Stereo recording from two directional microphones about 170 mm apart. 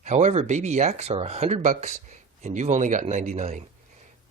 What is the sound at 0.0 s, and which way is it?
Speech, 45° right (ahead or behind).